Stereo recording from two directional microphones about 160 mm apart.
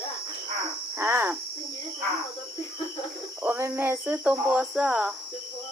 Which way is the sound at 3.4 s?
10° right (ahead or behind).